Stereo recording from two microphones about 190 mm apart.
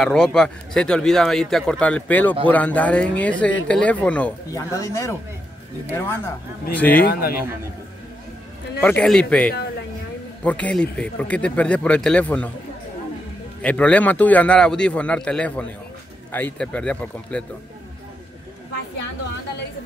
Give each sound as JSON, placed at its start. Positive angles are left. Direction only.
{"t": 0.0, "sound": "speech", "side_deg": 5}
{"t": 7.1, "sound": "a man's voice", "side_deg": 50}
{"t": 8.8, "sound": "speech", "side_deg": 5}
{"t": 13.6, "sound": "speech", "side_deg": 5}